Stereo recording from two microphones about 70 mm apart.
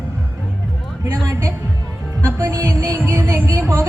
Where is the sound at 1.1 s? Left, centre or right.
Right.